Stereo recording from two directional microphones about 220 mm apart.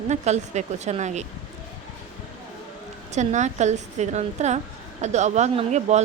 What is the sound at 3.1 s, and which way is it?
A woman's voice, 30° right (ahead or behind).